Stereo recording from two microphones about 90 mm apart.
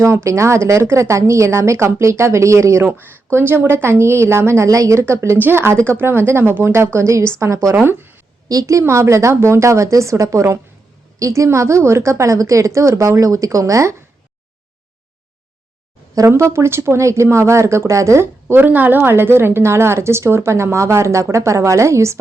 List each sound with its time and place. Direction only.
0.1 s a woman's voice: 30° right (ahead or behind)
7.8 s speech: 25° right (ahead or behind)
8.4 s speech: 40° right (ahead or behind)
16.1 s speech: 35° right (ahead or behind)